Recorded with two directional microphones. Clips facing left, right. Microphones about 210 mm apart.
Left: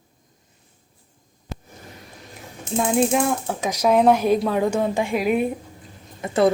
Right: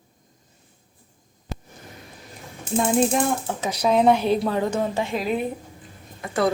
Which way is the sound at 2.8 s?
5° left (ahead or behind).